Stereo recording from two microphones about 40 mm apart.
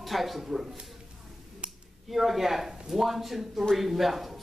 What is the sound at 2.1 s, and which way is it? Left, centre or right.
Speech, centre.